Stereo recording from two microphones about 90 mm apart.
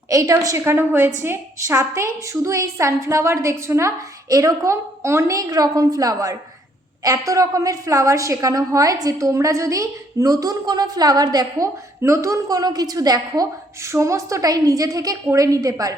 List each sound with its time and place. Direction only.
0.1 s a woman's voice: 40° right (ahead or behind)
12.0 s a woman's voice: 35° right (ahead or behind)
13.8 s a woman's voice: 30° right (ahead or behind)